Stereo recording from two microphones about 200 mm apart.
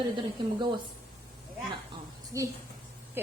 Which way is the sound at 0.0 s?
20° right (ahead or behind).